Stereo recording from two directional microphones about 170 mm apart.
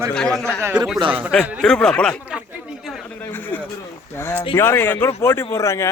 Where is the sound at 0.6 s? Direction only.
15° right (ahead or behind).